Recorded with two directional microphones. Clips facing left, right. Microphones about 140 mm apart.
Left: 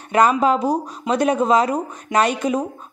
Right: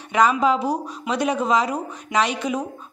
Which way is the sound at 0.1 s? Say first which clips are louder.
Left 2 dB; 50° left (ahead or behind).